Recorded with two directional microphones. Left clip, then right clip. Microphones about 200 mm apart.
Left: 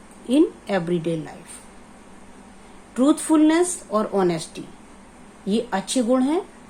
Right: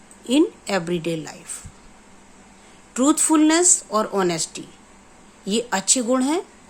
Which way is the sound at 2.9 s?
25° right (ahead or behind).